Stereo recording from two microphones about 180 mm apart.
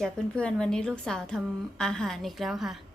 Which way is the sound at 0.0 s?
5° left (ahead or behind).